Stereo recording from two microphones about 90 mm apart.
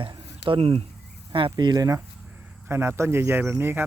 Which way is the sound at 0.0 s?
70° right (ahead or behind).